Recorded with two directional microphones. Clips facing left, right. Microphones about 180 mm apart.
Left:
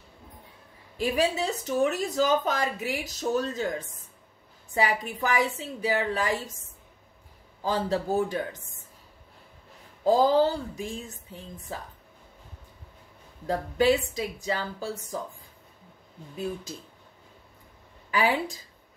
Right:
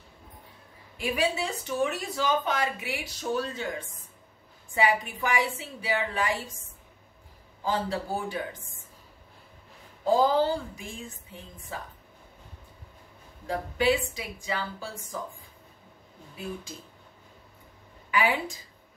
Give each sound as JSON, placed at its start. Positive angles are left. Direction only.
{"t": 0.9, "sound": "speech", "side_deg": 40}
{"t": 4.7, "sound": "speech", "side_deg": 40}
{"t": 7.6, "sound": "speech", "side_deg": 40}
{"t": 10.0, "sound": "speech", "side_deg": 40}
{"t": 13.5, "sound": "speech", "side_deg": 40}
{"t": 18.1, "sound": "speech", "side_deg": 35}